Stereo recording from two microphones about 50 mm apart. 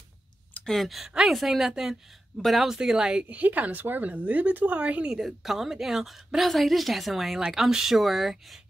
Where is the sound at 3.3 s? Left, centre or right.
Right.